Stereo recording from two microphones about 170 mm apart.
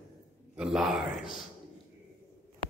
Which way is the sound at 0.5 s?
5° right (ahead or behind).